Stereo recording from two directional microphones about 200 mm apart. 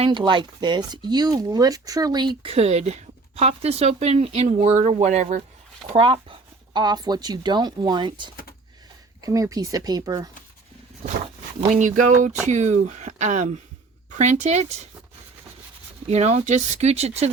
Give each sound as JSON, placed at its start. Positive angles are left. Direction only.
{"t": 0.0, "sound": "speech", "side_deg": -25}
{"t": 11.7, "sound": "speech", "side_deg": -40}
{"t": 16.0, "sound": "speech", "side_deg": -30}